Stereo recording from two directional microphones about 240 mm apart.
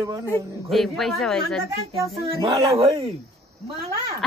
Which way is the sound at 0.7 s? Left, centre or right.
Centre.